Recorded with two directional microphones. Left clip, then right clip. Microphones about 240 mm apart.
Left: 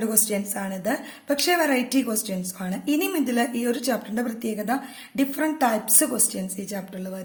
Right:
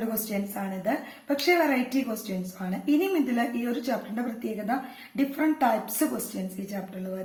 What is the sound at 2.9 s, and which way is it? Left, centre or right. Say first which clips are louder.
A woman's voice: left 1 dB; left.